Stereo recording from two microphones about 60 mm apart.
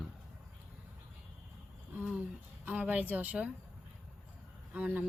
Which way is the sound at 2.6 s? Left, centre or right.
Right.